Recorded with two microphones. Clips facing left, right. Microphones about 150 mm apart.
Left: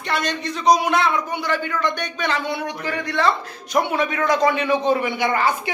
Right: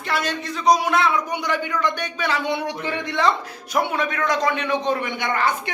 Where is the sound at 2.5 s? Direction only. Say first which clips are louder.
Right 1 dB; 25° right (ahead or behind).